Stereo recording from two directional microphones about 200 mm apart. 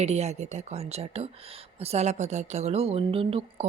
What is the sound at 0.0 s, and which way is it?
A woman's voice, 35° right (ahead or behind).